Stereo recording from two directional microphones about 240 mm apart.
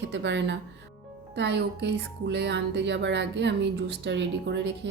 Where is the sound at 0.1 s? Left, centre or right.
Right.